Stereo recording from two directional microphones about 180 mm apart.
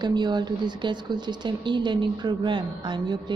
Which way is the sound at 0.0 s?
25° right (ahead or behind).